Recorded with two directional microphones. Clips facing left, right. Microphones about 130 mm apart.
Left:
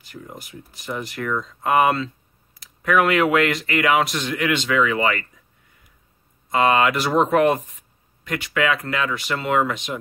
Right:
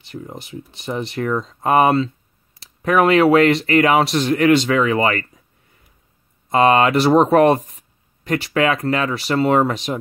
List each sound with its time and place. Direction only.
0.0 s speech: 25° right (ahead or behind)
6.5 s speech: 35° right (ahead or behind)